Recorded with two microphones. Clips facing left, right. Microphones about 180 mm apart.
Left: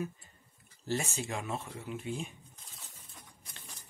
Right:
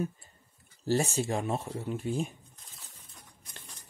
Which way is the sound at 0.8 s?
35° right (ahead or behind).